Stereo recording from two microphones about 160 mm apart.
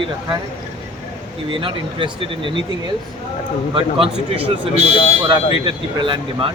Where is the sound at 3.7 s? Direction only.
35° right (ahead or behind).